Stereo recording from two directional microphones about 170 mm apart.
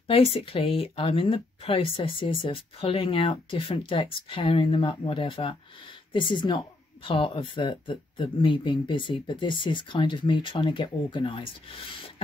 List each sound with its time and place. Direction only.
0.1 s speech: 35° left (ahead or behind)